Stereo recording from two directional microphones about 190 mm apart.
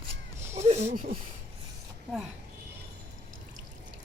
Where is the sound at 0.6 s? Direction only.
35° right (ahead or behind).